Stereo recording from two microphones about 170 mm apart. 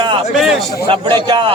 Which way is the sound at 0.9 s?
30° right (ahead or behind).